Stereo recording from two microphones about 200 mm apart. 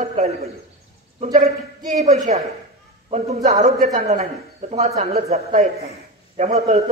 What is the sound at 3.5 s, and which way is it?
A man's voice, 35° right (ahead or behind).